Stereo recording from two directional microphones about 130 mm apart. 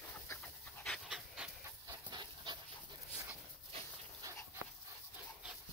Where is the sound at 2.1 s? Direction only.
35° right (ahead or behind).